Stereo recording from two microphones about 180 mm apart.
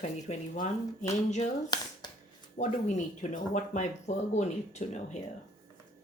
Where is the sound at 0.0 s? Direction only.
45° left (ahead or behind).